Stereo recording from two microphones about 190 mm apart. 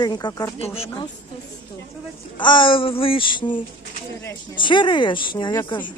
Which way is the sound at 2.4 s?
25° left (ahead or behind).